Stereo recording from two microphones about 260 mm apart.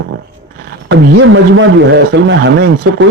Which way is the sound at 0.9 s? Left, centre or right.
Right.